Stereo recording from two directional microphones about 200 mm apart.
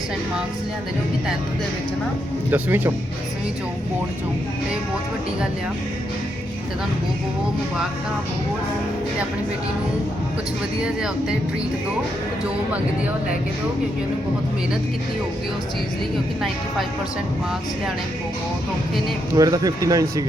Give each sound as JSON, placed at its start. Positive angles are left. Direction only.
{"t": 2.5, "sound": "speech", "side_deg": -10}
{"t": 10.8, "sound": "speech", "side_deg": -5}
{"t": 19.3, "sound": "speech", "side_deg": -20}